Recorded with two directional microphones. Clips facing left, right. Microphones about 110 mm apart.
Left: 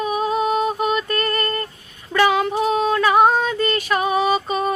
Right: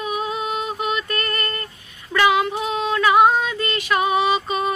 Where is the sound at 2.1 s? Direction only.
40° left (ahead or behind).